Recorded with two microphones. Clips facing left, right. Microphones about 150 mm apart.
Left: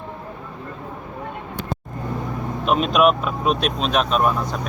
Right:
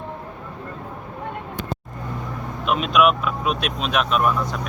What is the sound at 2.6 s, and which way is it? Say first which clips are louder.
Speech: left 1 dB; 40° left (ahead or behind).